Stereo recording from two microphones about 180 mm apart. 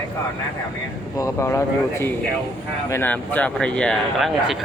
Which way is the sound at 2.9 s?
10° left (ahead or behind).